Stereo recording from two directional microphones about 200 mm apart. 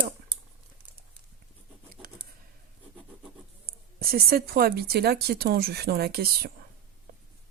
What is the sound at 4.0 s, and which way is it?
Speech, 50° right (ahead or behind).